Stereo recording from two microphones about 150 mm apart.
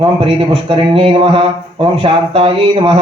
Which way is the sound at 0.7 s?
35° right (ahead or behind).